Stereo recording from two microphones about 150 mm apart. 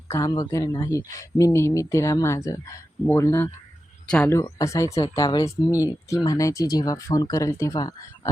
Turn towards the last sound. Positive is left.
turn(degrees=20)  # may be behind; listen again after turning